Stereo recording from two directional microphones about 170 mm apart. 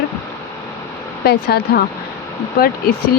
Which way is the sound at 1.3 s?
70° left (ahead or behind).